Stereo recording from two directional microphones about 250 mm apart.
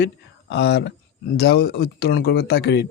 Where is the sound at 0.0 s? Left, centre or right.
Left.